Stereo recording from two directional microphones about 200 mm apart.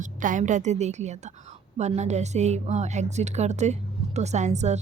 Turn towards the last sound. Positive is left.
turn(degrees=-35)  # may be behind; listen again after turning